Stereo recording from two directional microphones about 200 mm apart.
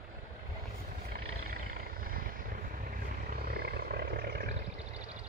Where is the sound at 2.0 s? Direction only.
45° right (ahead or behind).